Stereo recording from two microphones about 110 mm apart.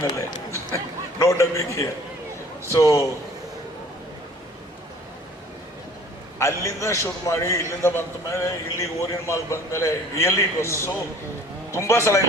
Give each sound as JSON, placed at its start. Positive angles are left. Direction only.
{"t": 0.0, "sound": "a man's voice", "side_deg": 30}
{"t": 6.4, "sound": "a man's voice", "side_deg": 25}